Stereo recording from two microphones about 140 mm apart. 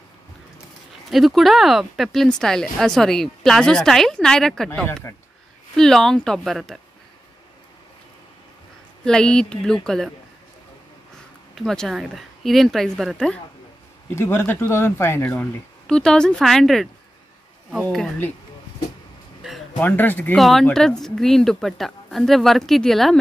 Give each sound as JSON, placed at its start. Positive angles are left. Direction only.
{"t": 1.1, "sound": "speech", "side_deg": 0}
{"t": 5.8, "sound": "speech", "side_deg": 5}
{"t": 9.0, "sound": "speech", "side_deg": 5}
{"t": 11.5, "sound": "speech", "side_deg": 5}
{"t": 14.1, "sound": "speech", "side_deg": 15}
{"t": 15.9, "sound": "speech", "side_deg": 5}
{"t": 19.8, "sound": "speech", "side_deg": 15}
{"t": 20.3, "sound": "speech", "side_deg": 0}